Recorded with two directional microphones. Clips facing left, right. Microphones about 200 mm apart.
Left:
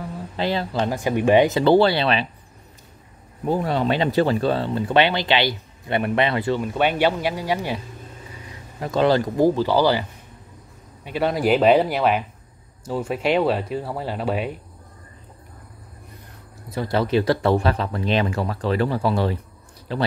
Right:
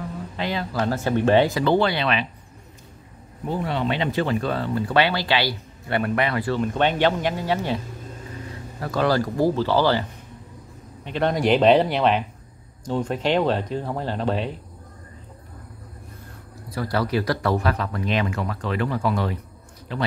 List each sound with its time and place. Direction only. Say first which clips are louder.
0.4 s speech: left 3 dB; 30° left (ahead or behind)
0.8 s speech: even; 15° left (ahead or behind)
1.6 s speech: left 4 dB; 30° left (ahead or behind)
3.4 s speech: left 4 dB; 40° left (ahead or behind); by 6.6 s 25° left (ahead or behind)
6.6 s speech: right 1 dB; 10° left (ahead or behind)
11.1 s speech: left 1 dB; 5° left (ahead or behind)
16.7 s speech: left 3 dB; 25° left (ahead or behind)